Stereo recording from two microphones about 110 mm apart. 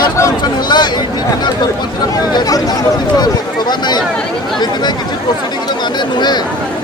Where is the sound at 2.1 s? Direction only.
35° left (ahead or behind).